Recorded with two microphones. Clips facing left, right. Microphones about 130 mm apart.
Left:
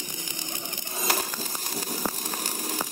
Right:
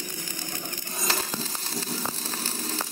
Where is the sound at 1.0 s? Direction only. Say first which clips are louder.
Left 1 dB; 15° left (ahead or behind).